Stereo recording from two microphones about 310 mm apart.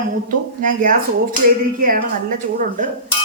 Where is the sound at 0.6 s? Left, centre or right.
Right.